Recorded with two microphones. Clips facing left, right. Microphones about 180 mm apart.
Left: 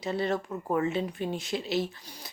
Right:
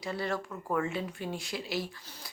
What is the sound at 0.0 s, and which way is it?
A woman's voice, 20° left (ahead or behind).